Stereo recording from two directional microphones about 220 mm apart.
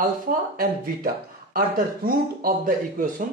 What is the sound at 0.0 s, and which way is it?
Speech, 40° right (ahead or behind).